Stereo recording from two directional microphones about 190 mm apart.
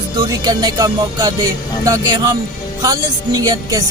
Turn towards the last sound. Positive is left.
turn(degrees=-20)  # may be behind; listen again after turning